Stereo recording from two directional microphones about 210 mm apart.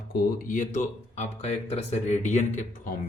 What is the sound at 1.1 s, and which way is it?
Speech, 30° left (ahead or behind).